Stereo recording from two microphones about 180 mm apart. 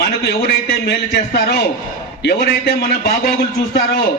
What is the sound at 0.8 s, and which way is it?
Speech, 60° left (ahead or behind).